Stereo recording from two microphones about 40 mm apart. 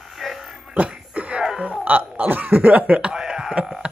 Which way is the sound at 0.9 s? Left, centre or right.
Right.